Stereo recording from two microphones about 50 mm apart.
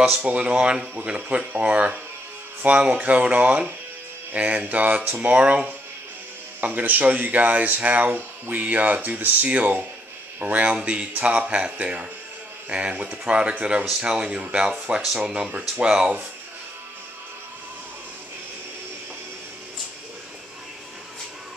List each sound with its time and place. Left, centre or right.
0.1 s speech: right
5.4 s speech: centre
6.6 s speech: right; by 16.2 s centre